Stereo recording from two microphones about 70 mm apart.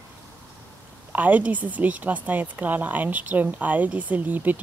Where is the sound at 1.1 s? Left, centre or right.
Right.